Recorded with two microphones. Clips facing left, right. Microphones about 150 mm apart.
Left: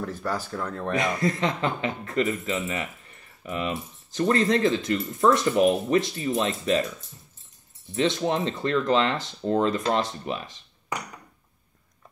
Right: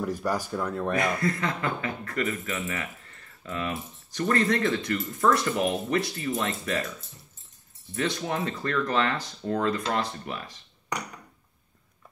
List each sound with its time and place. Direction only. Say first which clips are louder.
0.0 s speech: right 2 dB; 15° right (ahead or behind)
0.9 s speech: left 4 dB; 20° left (ahead or behind)
7.9 s speech: left 5 dB; 25° left (ahead or behind)